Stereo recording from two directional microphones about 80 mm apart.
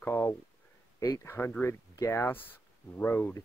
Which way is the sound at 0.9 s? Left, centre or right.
Left.